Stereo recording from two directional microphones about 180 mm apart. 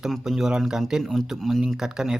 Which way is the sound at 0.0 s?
Centre (ahead or behind).